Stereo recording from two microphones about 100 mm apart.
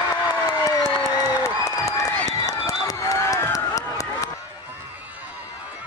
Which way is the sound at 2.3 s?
35° left (ahead or behind).